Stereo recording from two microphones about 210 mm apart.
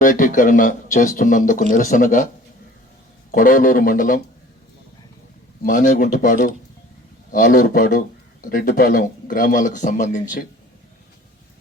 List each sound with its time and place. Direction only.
0.0 s speech: 40° left (ahead or behind)
3.3 s speech: 40° left (ahead or behind)
5.6 s speech: 40° left (ahead or behind)